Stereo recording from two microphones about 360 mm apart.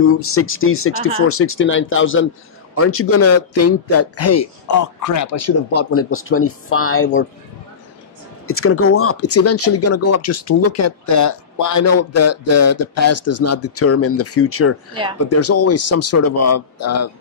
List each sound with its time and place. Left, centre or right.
0.0 s speech: left
8.5 s a man's voice: left